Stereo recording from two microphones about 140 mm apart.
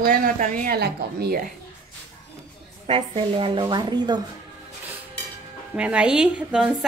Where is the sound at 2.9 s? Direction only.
40° right (ahead or behind).